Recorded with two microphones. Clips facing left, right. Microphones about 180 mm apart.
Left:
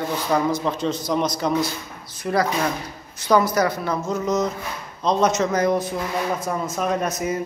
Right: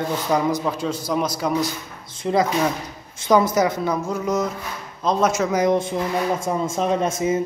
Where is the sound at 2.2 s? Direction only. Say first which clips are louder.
Right 2 dB; 20° right (ahead or behind).